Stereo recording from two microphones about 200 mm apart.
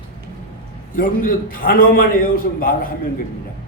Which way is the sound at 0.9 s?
45° left (ahead or behind).